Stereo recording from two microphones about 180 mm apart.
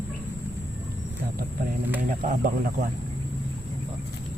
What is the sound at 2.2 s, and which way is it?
Speech, 50° right (ahead or behind).